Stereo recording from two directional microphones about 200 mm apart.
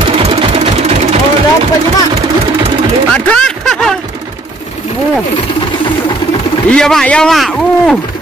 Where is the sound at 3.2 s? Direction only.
5° left (ahead or behind).